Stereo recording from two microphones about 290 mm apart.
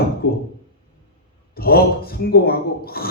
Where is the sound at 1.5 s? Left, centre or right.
Left.